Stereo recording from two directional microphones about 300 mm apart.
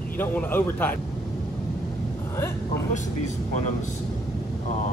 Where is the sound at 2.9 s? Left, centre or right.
Left.